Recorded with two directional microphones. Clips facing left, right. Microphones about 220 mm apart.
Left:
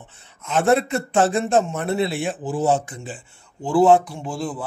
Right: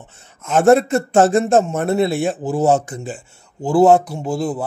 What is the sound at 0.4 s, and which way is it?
A man's voice, 45° right (ahead or behind).